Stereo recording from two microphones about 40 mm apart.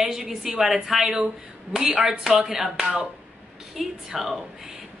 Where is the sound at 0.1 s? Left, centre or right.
Centre.